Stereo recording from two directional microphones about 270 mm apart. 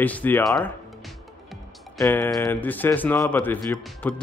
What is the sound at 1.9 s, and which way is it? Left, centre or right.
Speech, centre.